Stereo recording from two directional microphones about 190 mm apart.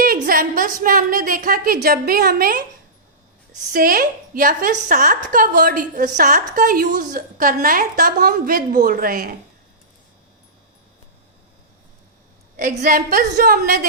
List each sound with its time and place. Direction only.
0.0 s a woman's voice: 50° right (ahead or behind)
3.7 s a woman's voice: 45° right (ahead or behind)
12.5 s a woman's voice: 45° right (ahead or behind)